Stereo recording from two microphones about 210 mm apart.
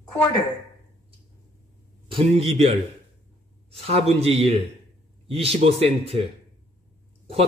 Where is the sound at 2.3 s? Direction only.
30° right (ahead or behind).